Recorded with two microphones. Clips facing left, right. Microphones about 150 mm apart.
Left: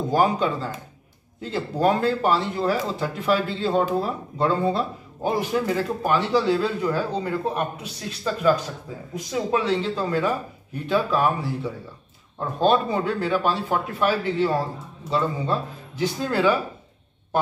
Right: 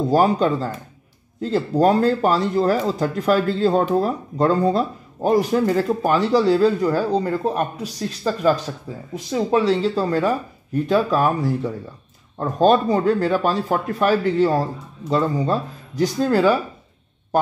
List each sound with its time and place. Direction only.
0.1 s speech: 35° right (ahead or behind)